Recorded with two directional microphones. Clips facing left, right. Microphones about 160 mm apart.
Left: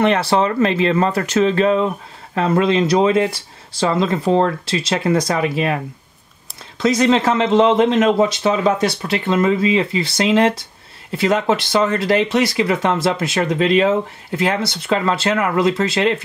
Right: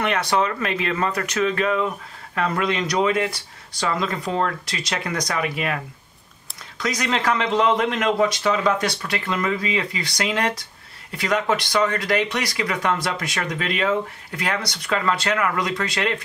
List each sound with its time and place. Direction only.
0.0 s speech: 30° left (ahead or behind)
6.8 s speech: 25° left (ahead or behind)